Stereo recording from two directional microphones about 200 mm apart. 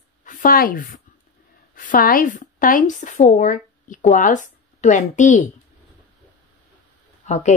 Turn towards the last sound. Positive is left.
turn(degrees=35)  # may be behind; listen again after turning